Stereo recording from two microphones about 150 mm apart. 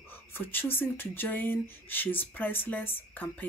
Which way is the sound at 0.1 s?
15° left (ahead or behind).